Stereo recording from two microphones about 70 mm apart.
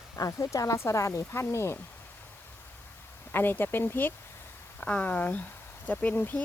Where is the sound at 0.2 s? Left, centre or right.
Left.